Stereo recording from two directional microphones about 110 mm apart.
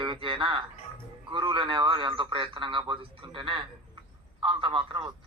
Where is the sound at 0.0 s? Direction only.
50° right (ahead or behind).